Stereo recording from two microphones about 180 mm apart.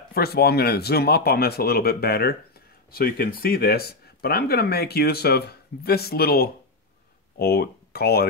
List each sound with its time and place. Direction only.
0.1 s speech: 60° left (ahead or behind)